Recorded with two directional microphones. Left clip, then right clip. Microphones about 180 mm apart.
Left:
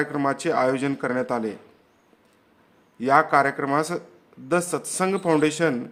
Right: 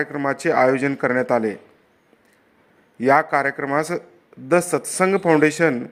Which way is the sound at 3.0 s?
20° right (ahead or behind).